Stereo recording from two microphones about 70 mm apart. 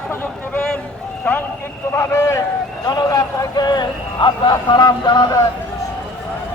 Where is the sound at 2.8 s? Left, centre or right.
Left.